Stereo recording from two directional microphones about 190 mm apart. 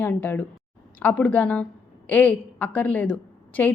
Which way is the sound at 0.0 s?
10° left (ahead or behind).